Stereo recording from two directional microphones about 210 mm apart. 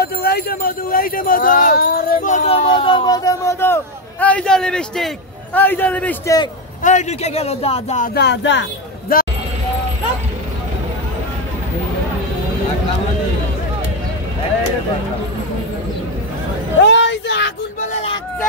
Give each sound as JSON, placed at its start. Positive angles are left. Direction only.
{"t": 0.0, "sound": "speech", "side_deg": 50}
{"t": 6.8, "sound": "speech", "side_deg": 35}
{"t": 8.1, "sound": "speech", "side_deg": 55}
{"t": 9.1, "sound": "speech", "side_deg": 45}
{"t": 16.8, "sound": "a sound", "side_deg": 60}
{"t": 17.7, "sound": "a sound", "side_deg": 25}